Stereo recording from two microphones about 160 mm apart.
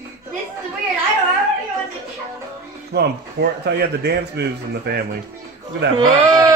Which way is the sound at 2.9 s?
90° right.